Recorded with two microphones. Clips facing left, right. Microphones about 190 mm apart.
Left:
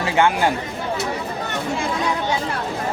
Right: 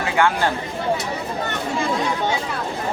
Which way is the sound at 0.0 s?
20° left (ahead or behind).